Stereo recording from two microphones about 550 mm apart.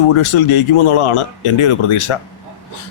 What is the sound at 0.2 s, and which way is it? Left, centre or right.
Speech, left.